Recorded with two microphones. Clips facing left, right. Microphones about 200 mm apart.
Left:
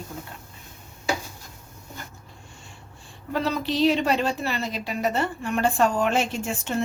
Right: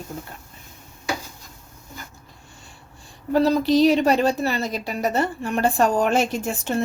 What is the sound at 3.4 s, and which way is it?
A woman's voice, 40° right (ahead or behind).